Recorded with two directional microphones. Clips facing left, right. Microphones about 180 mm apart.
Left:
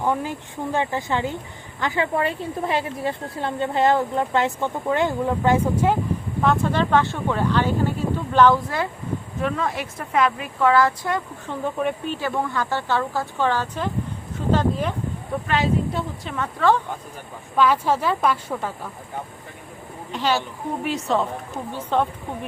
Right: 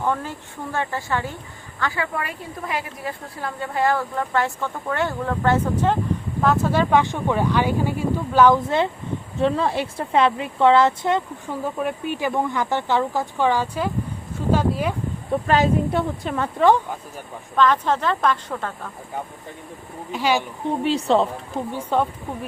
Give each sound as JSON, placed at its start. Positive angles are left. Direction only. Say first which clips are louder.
{"t": 0.0, "sound": "speech", "louder": "left 1 dB", "side_deg": 15}
{"t": 6.4, "sound": "speech", "louder": "right 1 dB", "side_deg": -5}
{"t": 8.5, "sound": "speech", "louder": "right 4 dB", "side_deg": -25}
{"t": 11.4, "sound": "speech", "louder": "left 1 dB", "side_deg": -5}
{"t": 12.1, "sound": "speech", "louder": "right 2 dB", "side_deg": -15}
{"t": 14.3, "sound": "a sound", "louder": "even", "side_deg": -10}
{"t": 15.4, "sound": "a woman's voice", "louder": "right 4 dB", "side_deg": -40}
{"t": 15.9, "sound": "speech", "louder": "right 5 dB", "side_deg": -60}
{"t": 16.6, "sound": "speech", "louder": "right 3 dB", "side_deg": -15}
{"t": 17.6, "sound": "speech", "louder": "even", "side_deg": 10}
{"t": 20.1, "sound": "speech", "louder": "right 1 dB", "side_deg": -10}
{"t": 20.8, "sound": "a woman's voice", "louder": "right 4 dB", "side_deg": -30}
{"t": 21.7, "sound": "speech", "louder": "even", "side_deg": -10}